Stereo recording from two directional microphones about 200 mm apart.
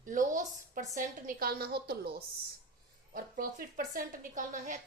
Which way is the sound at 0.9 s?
40° right (ahead or behind).